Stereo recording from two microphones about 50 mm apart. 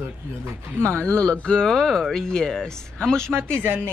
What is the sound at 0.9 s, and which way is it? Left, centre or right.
Speech, left.